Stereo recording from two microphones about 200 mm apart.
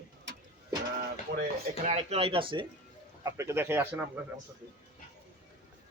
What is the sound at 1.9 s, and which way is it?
Speech, 30° right (ahead or behind).